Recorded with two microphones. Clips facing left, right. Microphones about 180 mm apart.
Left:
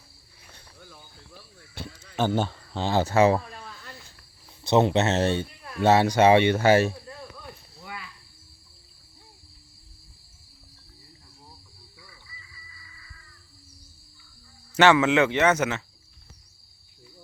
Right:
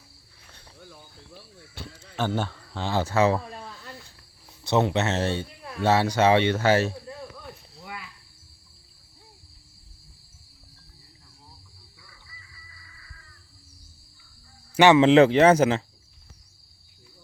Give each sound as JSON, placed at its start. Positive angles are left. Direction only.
{"t": 2.1, "sound": "speech", "side_deg": 20}
{"t": 3.5, "sound": "a sound", "side_deg": -20}
{"t": 4.6, "sound": "speech", "side_deg": 20}
{"t": 7.4, "sound": "cricket", "side_deg": 0}
{"t": 14.8, "sound": "a man's voice", "side_deg": -15}
{"t": 15.0, "sound": "speech", "side_deg": -35}